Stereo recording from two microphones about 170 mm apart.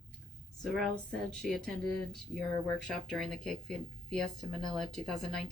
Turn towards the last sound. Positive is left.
turn(degrees=0)  # may be behind; listen again after turning